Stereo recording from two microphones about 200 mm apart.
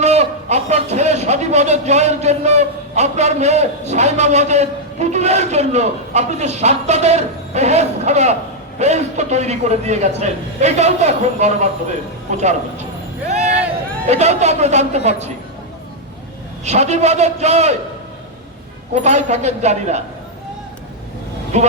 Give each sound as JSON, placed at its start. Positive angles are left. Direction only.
{"t": 0.0, "sound": "a man's voice", "side_deg": -35}
{"t": 13.2, "sound": "a sound", "side_deg": -35}
{"t": 14.1, "sound": "a man's voice", "side_deg": -35}
{"t": 16.6, "sound": "a man's voice", "side_deg": -35}
{"t": 19.0, "sound": "a man's voice", "side_deg": -35}
{"t": 21.5, "sound": "a man's voice", "side_deg": -35}